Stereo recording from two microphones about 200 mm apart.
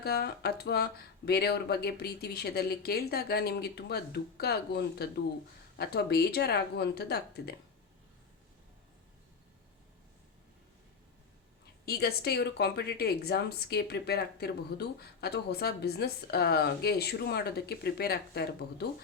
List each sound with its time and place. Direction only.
0.0 s speech: 55° left (ahead or behind)
11.9 s speech: 50° left (ahead or behind)